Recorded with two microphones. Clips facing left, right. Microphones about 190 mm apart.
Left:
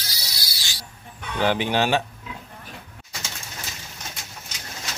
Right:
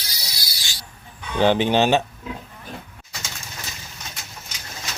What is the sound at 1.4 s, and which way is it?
Speech, 25° right (ahead or behind).